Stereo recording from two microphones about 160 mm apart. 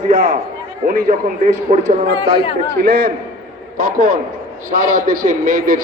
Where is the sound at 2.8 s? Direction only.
75° right (ahead or behind).